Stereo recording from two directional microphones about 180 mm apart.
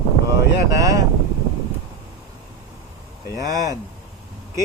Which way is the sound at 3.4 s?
20° right (ahead or behind).